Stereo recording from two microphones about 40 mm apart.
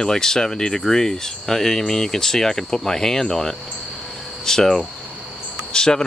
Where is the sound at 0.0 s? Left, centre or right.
Centre.